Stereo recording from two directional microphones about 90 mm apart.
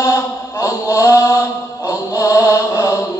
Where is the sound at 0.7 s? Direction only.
35° left (ahead or behind).